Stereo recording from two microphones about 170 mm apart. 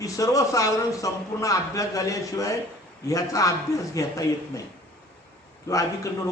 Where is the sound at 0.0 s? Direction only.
20° left (ahead or behind).